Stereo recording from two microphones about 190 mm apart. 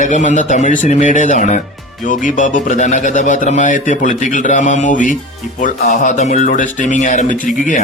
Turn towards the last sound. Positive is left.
turn(degrees=40)  # may be behind; listen again after turning